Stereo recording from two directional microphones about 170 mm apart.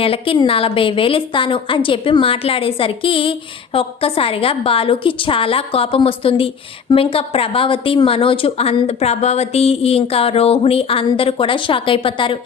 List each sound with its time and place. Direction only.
0.0 s a woman's voice: 35° left (ahead or behind)